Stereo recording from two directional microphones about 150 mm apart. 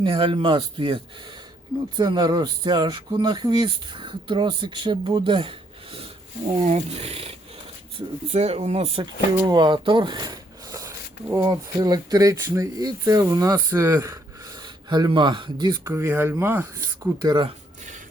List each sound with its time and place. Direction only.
0.0 s speech: 35° right (ahead or behind)
9.5 s speech: 30° right (ahead or behind)